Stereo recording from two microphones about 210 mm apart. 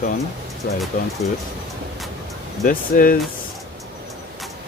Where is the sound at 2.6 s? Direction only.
40° left (ahead or behind).